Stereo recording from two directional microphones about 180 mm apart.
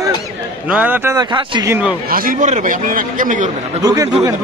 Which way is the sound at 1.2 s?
25° right (ahead or behind).